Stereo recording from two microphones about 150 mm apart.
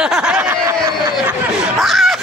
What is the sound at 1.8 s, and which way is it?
Screaming, centre (ahead or behind).